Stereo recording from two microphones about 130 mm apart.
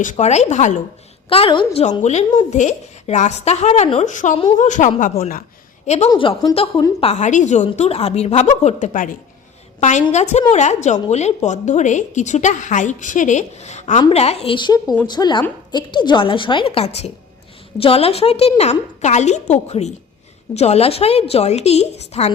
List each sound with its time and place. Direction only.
0.0 s a woman's voice: 75° left (ahead or behind)
1.3 s a woman's voice: 40° left (ahead or behind)
2.0 s a woman's voice: 65° left (ahead or behind)
4.0 s a woman's voice: 75° left (ahead or behind)
5.8 s a woman's voice: 60° left (ahead or behind)
6.1 s a woman's voice: 40° left (ahead or behind)
7.0 s a woman's voice: 60° left (ahead or behind)
9.8 s a woman's voice: 60° left (ahead or behind)
14.1 s a woman's voice: 55° left (ahead or behind)